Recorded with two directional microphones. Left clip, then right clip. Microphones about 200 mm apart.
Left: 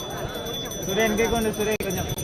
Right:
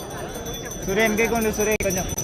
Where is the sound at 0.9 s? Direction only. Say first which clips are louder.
Right 2 dB; 50° right (ahead or behind).